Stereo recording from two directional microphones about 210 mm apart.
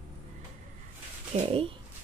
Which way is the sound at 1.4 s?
25° right (ahead or behind).